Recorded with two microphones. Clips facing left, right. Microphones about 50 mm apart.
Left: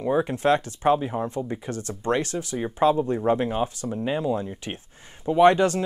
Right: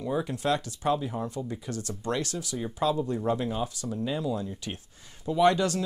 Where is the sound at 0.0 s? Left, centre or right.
Left.